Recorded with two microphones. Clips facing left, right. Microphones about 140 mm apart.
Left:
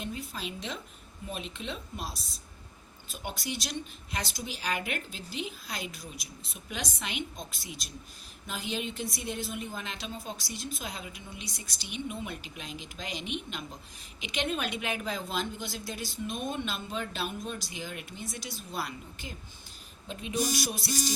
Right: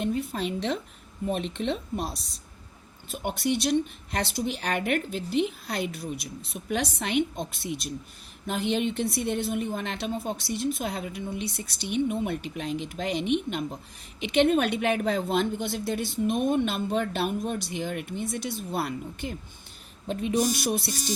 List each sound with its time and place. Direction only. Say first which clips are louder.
0.0 s a woman's voice: right 9 dB; 60° right (ahead or behind)